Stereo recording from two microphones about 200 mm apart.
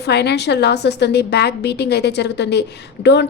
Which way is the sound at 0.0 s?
55° left (ahead or behind).